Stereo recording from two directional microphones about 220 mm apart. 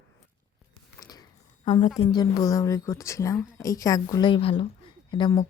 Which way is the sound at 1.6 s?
25° left (ahead or behind).